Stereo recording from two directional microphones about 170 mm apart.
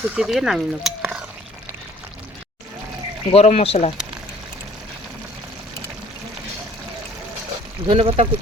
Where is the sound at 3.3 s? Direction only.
40° left (ahead or behind).